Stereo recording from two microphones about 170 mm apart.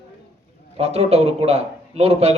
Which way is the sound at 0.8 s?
35° right (ahead or behind).